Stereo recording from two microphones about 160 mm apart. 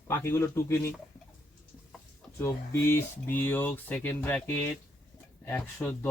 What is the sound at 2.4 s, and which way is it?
Speech, 15° left (ahead or behind).